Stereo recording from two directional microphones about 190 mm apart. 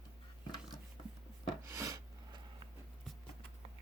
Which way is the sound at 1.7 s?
15° right (ahead or behind).